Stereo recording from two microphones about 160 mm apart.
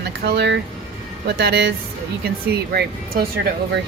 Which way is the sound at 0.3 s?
90° right.